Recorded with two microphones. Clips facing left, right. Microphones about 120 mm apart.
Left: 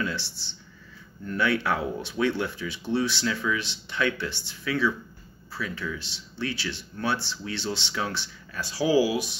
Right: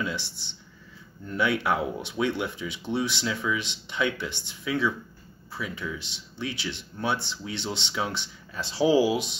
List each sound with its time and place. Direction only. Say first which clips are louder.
0.0 s speech: left 1 dB; 20° right (ahead or behind)